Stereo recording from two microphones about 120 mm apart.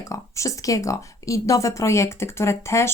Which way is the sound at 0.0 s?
25° left (ahead or behind).